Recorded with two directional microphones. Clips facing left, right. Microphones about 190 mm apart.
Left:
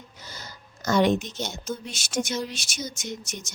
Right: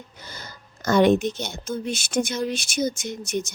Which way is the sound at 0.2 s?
55° right (ahead or behind).